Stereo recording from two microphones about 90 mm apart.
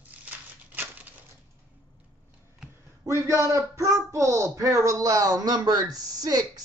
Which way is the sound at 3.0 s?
35° right (ahead or behind).